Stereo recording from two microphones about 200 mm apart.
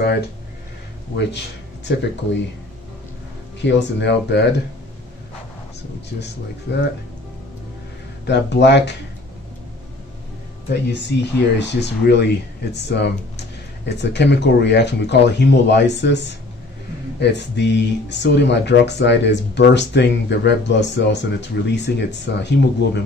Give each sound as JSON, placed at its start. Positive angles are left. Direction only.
{"t": 1.9, "sound": "speech", "side_deg": 60}
{"t": 3.6, "sound": "speech", "side_deg": 60}
{"t": 8.3, "sound": "speech", "side_deg": 60}
{"t": 10.7, "sound": "speech", "side_deg": 60}